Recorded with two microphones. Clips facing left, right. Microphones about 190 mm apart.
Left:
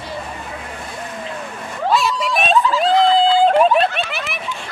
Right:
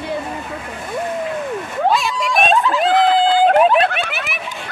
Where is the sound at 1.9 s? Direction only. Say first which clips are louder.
Left 4 dB; centre (ahead or behind).